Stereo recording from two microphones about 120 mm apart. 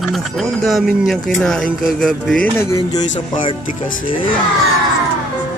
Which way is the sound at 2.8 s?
35° left (ahead or behind).